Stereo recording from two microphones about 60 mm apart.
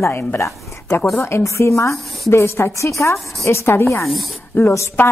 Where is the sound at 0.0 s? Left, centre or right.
Left.